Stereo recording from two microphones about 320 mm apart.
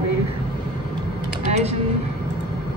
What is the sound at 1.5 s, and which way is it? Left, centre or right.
Speech, centre.